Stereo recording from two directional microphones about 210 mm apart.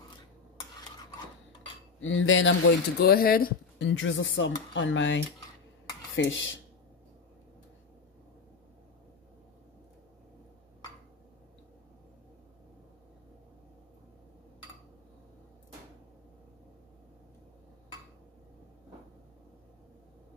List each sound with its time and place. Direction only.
2.0 s speech: 65° left (ahead or behind); by 3.9 s 45° left (ahead or behind)
4.0 s speech: 65° left (ahead or behind)